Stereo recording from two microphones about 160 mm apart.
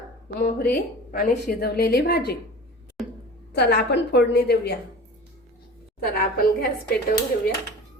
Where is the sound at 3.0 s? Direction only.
Centre (ahead or behind).